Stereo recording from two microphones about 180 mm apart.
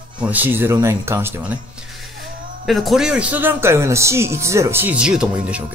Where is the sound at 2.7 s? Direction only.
Centre (ahead or behind).